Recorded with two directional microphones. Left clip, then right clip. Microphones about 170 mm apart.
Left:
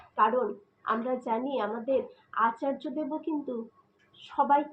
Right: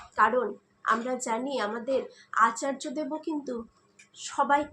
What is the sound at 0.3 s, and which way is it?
A woman's voice, 35° right (ahead or behind).